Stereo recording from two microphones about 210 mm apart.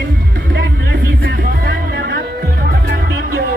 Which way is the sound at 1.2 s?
55° right (ahead or behind).